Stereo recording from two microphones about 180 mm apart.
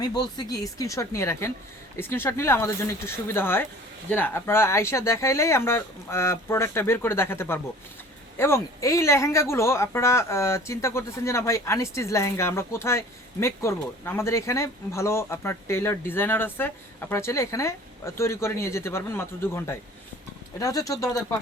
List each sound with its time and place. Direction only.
0.0 s speech: 25° left (ahead or behind)